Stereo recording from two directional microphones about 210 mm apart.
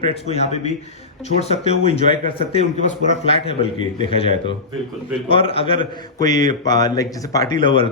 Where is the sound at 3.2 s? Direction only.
30° left (ahead or behind).